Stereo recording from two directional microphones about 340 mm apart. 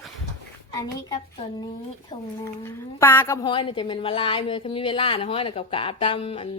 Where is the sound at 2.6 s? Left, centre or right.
Centre.